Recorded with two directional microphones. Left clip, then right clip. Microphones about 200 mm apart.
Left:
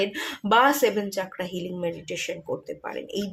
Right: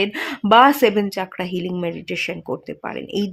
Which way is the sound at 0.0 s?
55° right (ahead or behind).